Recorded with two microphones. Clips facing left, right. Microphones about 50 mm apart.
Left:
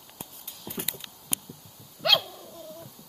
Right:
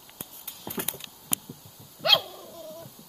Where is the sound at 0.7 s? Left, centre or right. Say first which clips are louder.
Right 2 dB; right.